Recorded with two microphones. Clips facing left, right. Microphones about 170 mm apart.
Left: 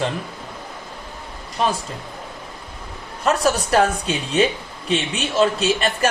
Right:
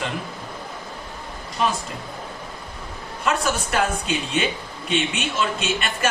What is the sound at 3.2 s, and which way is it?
A man's voice, 35° left (ahead or behind).